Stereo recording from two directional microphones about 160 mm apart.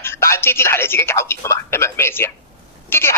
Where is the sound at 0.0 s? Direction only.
15° left (ahead or behind).